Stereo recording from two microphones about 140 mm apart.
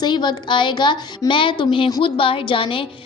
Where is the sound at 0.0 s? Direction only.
30° left (ahead or behind).